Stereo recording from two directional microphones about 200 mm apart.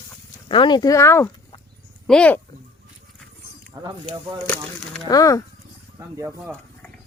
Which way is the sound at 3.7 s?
20° right (ahead or behind).